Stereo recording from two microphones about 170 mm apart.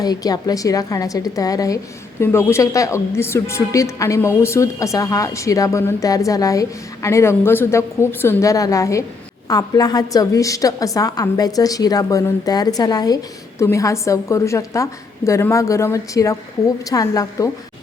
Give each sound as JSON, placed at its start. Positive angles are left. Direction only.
{"t": 0.0, "sound": "a woman's voice", "side_deg": 20}